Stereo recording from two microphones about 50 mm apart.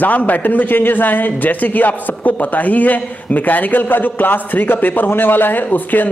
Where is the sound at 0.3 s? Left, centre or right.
Left.